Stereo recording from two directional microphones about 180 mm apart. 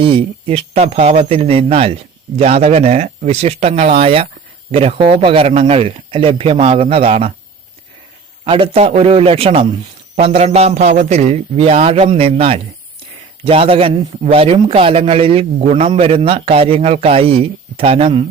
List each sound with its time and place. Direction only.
0.0 s a man's voice: 30° right (ahead or behind)
8.4 s a man's voice: 30° right (ahead or behind)